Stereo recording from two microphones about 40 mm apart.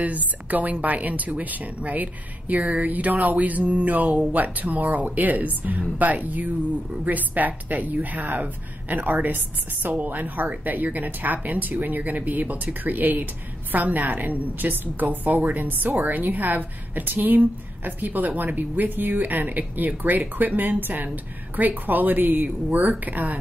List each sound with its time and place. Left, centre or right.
0.0 s a woman's voice: right